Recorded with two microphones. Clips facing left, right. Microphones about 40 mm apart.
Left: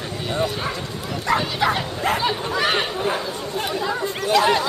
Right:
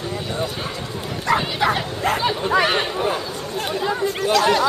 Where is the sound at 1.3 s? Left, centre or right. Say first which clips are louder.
Right 1 dB; centre.